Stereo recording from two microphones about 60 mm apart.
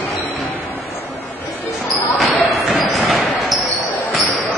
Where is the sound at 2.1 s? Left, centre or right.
Centre.